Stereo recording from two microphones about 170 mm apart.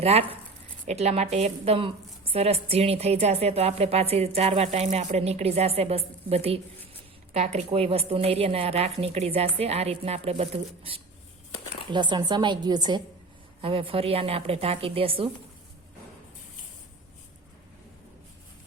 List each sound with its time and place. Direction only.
0.0 s speech: 35° right (ahead or behind)
11.9 s a woman's voice: 25° right (ahead or behind)